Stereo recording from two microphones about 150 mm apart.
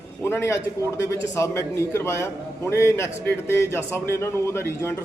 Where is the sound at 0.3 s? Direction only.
15° left (ahead or behind).